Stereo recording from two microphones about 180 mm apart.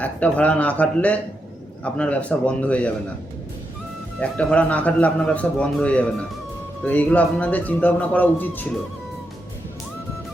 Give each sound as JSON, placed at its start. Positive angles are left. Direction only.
{"t": 0.0, "sound": "a man's voice", "side_deg": 10}
{"t": 4.2, "sound": "a man's voice", "side_deg": 5}